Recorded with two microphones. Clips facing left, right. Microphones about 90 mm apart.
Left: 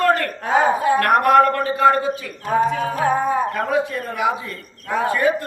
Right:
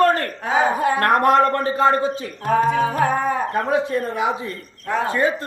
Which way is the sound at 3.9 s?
25° right (ahead or behind).